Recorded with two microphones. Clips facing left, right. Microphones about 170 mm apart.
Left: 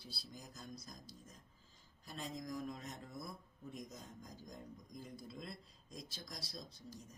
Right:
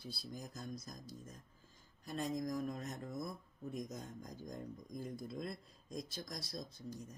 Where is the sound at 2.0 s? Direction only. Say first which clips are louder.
Right 7 dB; 50° right (ahead or behind).